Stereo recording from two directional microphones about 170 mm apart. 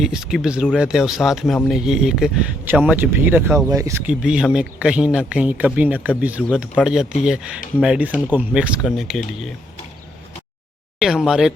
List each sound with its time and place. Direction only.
0.0 s speech: 5° right (ahead or behind)
4.0 s speech: 5° right (ahead or behind)
11.0 s speech: 5° right (ahead or behind)